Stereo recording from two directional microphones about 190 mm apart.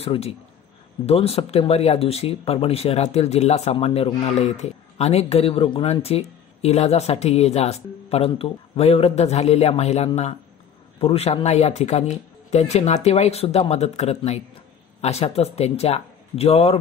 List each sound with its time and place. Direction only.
0.0 s speech: 30° left (ahead or behind)